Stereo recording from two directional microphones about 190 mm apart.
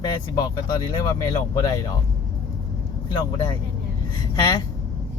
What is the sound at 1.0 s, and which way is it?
Speech, 15° left (ahead or behind).